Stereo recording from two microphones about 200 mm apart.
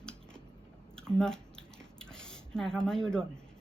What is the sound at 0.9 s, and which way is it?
Squish, 5° left (ahead or behind).